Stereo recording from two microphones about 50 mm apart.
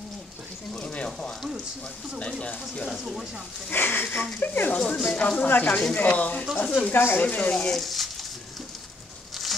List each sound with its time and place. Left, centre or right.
0.7 s frying: left
2.4 s speech: left
3.7 s speech: left
5.0 s speech: left
7.2 s speech: left
7.6 s a sound: centre
9.3 s a sound: centre